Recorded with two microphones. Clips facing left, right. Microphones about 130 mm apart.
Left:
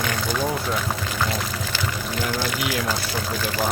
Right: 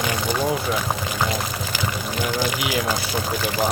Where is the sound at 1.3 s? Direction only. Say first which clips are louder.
Right 1 dB; 15° right (ahead or behind).